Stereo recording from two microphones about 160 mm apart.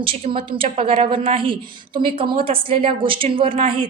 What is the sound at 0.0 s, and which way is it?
A woman's voice, 35° right (ahead or behind).